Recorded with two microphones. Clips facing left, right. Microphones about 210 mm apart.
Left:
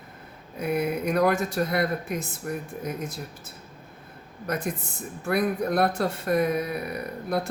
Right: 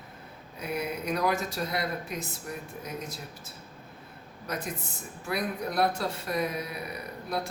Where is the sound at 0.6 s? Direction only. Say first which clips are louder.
Left 7 dB; 55° left (ahead or behind).